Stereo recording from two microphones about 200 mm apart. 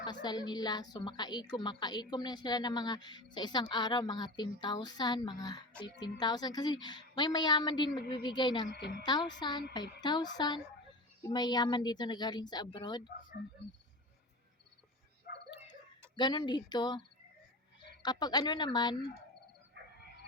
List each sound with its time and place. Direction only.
0.0 s a woman's voice: 20° left (ahead or behind)
8.7 s a woman's voice: 55° left (ahead or behind)
9.0 s a woman's voice: 20° left (ahead or behind)
13.4 s speech: 5° right (ahead or behind)
16.1 s a woman's voice: 20° left (ahead or behind)
18.0 s a woman's voice: 20° left (ahead or behind)
19.8 s a sound: 55° right (ahead or behind)